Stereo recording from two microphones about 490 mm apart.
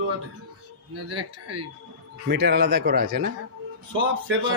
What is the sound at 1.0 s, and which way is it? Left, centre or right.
Speech, right.